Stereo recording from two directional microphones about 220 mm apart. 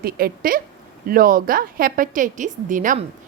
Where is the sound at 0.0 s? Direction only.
40° right (ahead or behind).